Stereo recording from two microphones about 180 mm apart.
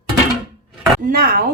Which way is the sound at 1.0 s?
55° right (ahead or behind).